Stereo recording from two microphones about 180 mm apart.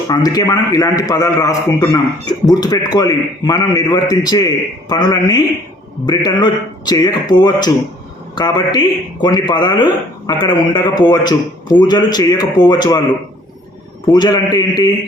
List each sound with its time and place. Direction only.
0.1 s a man's voice: 20° left (ahead or behind)
14.1 s a man's voice: 25° left (ahead or behind)